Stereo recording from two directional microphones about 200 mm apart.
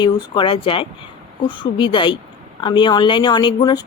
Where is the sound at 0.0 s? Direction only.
25° left (ahead or behind).